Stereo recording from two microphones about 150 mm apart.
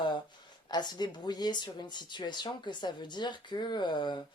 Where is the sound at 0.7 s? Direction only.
30° left (ahead or behind).